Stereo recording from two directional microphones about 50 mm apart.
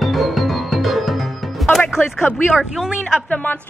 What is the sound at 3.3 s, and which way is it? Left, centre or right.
Speech, left.